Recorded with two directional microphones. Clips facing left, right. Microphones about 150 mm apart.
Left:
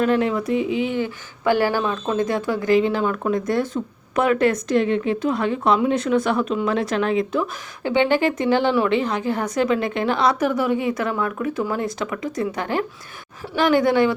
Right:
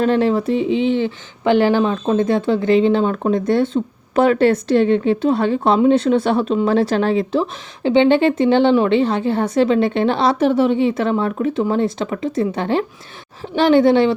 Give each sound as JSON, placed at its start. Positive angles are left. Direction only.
{"t": 0.0, "sound": "speech", "side_deg": -30}